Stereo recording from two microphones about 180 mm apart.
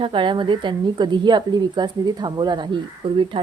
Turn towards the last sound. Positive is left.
turn(degrees=-30)  # may be behind; listen again after turning